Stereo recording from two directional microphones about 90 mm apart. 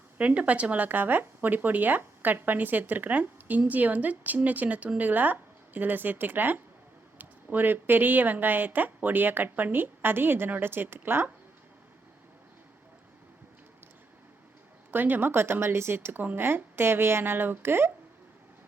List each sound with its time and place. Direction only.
0.2 s speech: 15° right (ahead or behind)
14.8 s speech: 20° right (ahead or behind)